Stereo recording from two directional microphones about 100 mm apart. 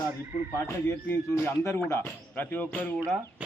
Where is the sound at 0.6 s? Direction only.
25° left (ahead or behind).